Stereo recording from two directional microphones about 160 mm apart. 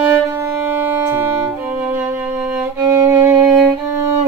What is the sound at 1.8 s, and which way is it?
Music, 10° right (ahead or behind).